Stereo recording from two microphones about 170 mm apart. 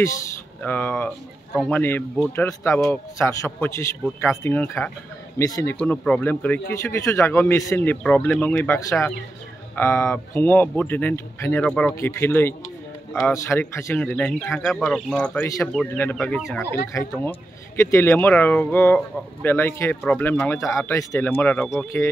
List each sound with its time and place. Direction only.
0.6 s speech: 10° left (ahead or behind)
1.8 s speech: 10° left (ahead or behind)
5.8 s speech: 5° left (ahead or behind)
9.8 s speech: 15° left (ahead or behind)
15.4 s speech: 20° left (ahead or behind)
15.7 s speech: 5° left (ahead or behind)